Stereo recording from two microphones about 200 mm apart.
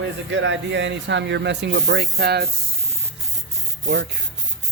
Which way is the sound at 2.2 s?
55° right (ahead or behind).